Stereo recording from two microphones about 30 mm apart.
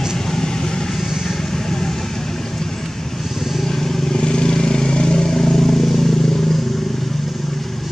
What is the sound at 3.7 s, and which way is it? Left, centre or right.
Vehicle, centre.